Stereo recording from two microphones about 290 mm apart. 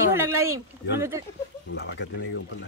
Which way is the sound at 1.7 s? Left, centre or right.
Left.